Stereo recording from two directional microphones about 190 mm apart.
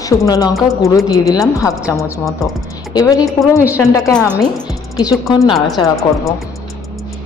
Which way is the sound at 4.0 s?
5° left (ahead or behind).